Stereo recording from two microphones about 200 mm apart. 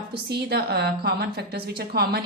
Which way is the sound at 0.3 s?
55° right (ahead or behind).